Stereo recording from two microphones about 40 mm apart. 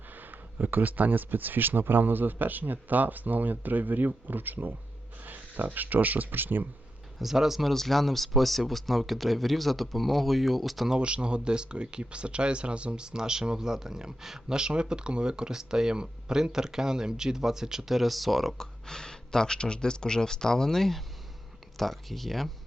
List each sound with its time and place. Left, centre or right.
0.2 s speech: right
5.2 s a sound: right
5.7 s speech: right
7.2 s speech: centre
7.7 s speech: centre
11.0 s speech: right; by 18.5 s centre
18.5 s speech: centre